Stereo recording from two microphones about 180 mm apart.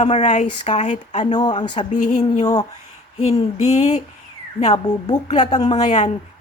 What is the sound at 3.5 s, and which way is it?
Speech, 40° left (ahead or behind).